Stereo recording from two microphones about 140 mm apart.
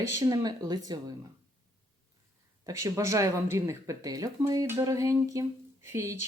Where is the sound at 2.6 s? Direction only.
20° right (ahead or behind).